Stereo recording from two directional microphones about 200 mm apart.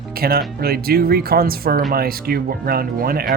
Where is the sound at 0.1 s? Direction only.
50° right (ahead or behind).